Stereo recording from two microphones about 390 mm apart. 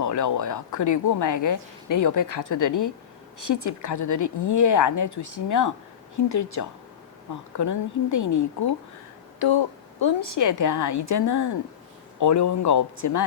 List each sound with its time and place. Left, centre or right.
0.0 s speech: left
9.4 s speech: left